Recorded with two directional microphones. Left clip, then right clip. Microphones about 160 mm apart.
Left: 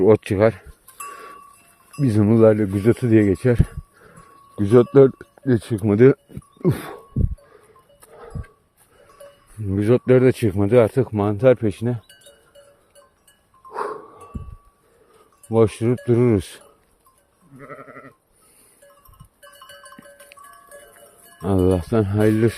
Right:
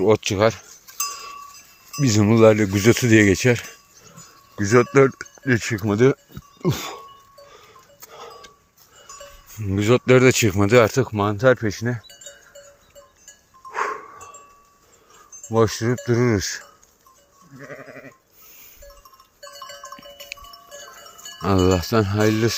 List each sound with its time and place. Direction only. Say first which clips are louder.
0.0 s speech: left 2 dB; 60° left (ahead or behind)
1.0 s cowbell: right 4 dB; 50° left (ahead or behind)
2.0 s speech: even; 25° left (ahead or behind)
2.6 s speech: right 2 dB; 15° left (ahead or behind)
5.5 s speech: even; 25° left (ahead or behind)
5.8 s speech: left 6 dB; 70° left (ahead or behind)
8.1 s a sound: right 1 dB; 40° left (ahead or behind)
9.6 s speech: even; 30° left (ahead or behind)
11.0 s speech: left 1 dB; 45° left (ahead or behind)
13.7 s a sound: right 2 dB; 50° left (ahead or behind)
15.5 s speech: left 2 dB; 55° left (ahead or behind)
17.7 s sheep: right 1 dB; 5° right (ahead or behind)
21.4 s wind chime: right 1 dB; 25° left (ahead or behind); by 22.5 s 40° left (ahead or behind)